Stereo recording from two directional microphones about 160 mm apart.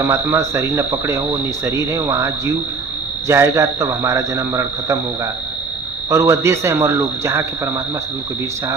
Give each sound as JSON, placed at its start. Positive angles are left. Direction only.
{"t": 0.0, "sound": "speech", "side_deg": -15}